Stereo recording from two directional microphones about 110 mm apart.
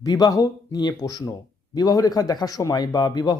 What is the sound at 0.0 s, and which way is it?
Speech, 35° left (ahead or behind).